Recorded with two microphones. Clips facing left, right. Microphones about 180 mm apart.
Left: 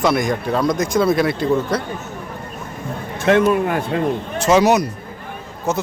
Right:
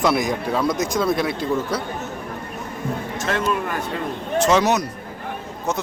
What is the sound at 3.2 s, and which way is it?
Speech, 55° left (ahead or behind).